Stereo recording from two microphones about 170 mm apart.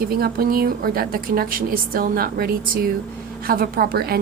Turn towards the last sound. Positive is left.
turn(degrees=-65)  # may be behind; listen again after turning